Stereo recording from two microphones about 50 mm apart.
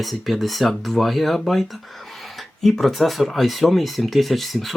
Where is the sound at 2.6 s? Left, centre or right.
Centre.